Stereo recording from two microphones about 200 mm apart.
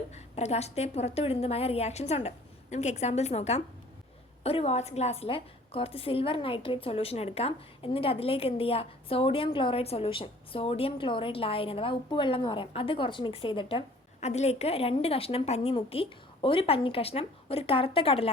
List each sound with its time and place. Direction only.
0.1 s a woman's voice: 35° left (ahead or behind)